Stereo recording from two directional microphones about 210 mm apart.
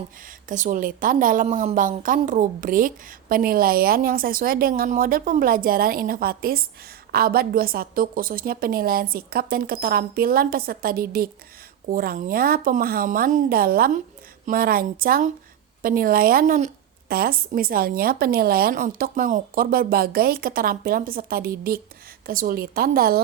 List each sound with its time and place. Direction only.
0.4 s a woman's voice: 35° right (ahead or behind)